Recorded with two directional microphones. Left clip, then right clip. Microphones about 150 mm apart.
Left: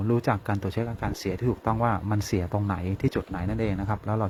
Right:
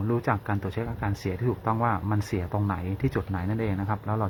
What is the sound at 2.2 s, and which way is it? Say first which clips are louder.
Speech: left 3 dB; 55° left (ahead or behind).